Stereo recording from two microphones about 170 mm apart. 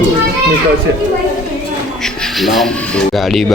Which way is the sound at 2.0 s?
Centre (ahead or behind).